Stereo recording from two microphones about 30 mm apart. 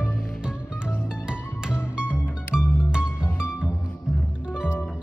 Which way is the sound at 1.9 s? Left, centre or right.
Right.